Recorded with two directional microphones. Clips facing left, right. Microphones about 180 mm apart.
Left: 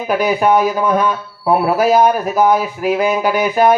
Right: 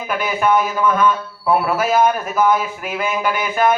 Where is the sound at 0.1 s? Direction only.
40° left (ahead or behind).